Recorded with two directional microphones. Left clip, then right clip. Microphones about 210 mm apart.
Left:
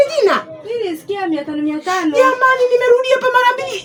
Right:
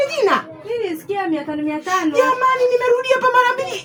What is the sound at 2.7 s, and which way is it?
Speech, 15° right (ahead or behind).